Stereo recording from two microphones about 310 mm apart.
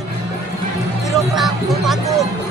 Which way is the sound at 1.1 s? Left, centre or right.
Centre.